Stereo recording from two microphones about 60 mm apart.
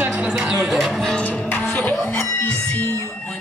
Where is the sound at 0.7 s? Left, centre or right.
Centre.